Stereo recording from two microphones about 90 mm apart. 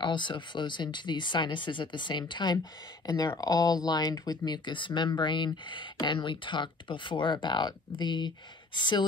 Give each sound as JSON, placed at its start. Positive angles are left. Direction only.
{"t": 0.0, "sound": "speech", "side_deg": 60}
{"t": 3.3, "sound": "speech", "side_deg": 45}